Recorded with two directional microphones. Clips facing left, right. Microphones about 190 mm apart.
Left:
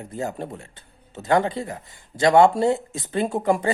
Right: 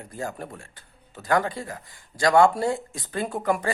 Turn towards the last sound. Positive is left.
turn(degrees=25)  # may be behind; listen again after turning